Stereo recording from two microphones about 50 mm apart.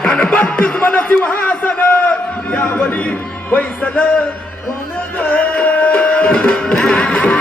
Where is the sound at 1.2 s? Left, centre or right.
Left.